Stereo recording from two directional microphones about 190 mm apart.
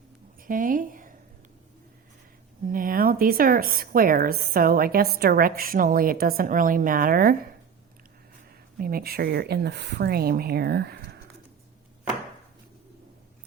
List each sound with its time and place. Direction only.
0.4 s a woman's voice: 45° right (ahead or behind)
2.6 s speech: 45° right (ahead or behind)
8.8 s speech: 50° right (ahead or behind)